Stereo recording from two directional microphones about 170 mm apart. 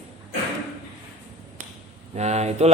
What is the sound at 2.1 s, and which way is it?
Speech, 40° right (ahead or behind).